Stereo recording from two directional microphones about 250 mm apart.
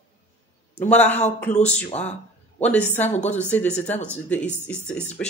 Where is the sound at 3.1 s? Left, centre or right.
Left.